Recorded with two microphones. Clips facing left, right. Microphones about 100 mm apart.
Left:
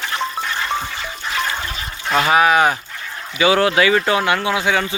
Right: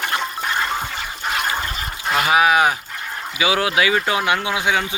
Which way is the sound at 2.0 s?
5° right (ahead or behind).